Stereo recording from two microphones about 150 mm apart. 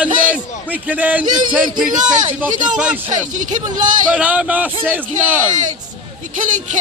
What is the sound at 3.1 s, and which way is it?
Speech, 55° right (ahead or behind).